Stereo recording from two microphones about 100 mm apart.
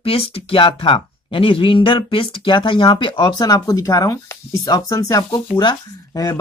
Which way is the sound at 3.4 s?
40° left (ahead or behind).